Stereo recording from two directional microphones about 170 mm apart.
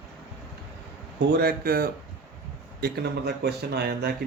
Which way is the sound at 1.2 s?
70° right (ahead or behind).